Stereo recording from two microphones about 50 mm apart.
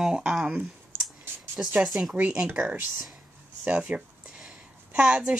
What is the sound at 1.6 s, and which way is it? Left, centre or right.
Speech, right.